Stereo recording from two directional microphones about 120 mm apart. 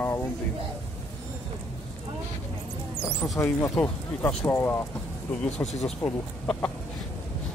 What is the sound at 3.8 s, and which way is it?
Speech, 15° left (ahead or behind).